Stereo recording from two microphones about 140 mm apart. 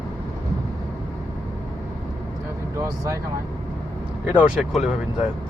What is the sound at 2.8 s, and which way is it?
Speech, 20° right (ahead or behind).